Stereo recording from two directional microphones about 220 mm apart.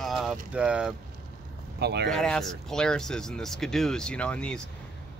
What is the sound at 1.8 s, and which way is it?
Speech, 50° right (ahead or behind).